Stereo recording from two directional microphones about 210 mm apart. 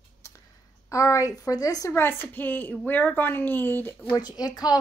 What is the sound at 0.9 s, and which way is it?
Speech, 15° left (ahead or behind).